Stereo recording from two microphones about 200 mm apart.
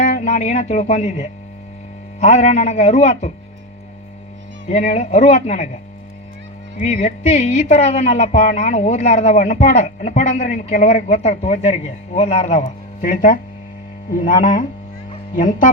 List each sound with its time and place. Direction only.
0.0 s speech: 35° left (ahead or behind)
4.7 s speech: 35° left (ahead or behind)
6.7 s speech: 35° left (ahead or behind)